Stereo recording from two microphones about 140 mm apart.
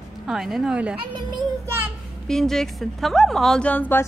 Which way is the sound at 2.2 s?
5° left (ahead or behind).